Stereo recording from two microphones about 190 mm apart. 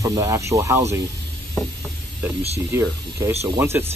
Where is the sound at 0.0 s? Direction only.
15° right (ahead or behind).